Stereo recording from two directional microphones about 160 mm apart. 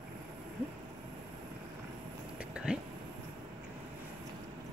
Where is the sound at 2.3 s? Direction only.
5° right (ahead or behind).